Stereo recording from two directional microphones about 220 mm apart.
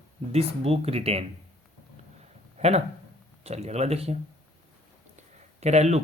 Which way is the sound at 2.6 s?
30° right (ahead or behind).